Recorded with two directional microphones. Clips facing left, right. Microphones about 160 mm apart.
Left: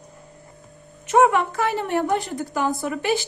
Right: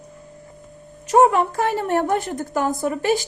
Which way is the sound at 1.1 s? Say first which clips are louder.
Right 2 dB; 35° right (ahead or behind).